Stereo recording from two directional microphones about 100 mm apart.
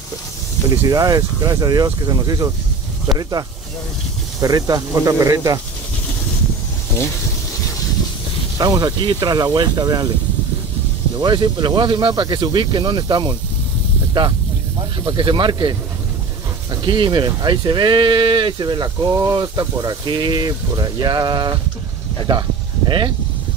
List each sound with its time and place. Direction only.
0.7 s speech: 35° right (ahead or behind)
8.5 s speech: 40° right (ahead or behind)
11.1 s speech: 50° right (ahead or behind)
14.2 s speech: 60° right (ahead or behind)
16.8 s speech: 50° right (ahead or behind)
22.8 s speech: 50° right (ahead or behind)